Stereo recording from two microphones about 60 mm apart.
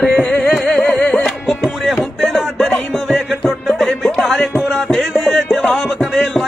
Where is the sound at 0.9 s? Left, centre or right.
Left.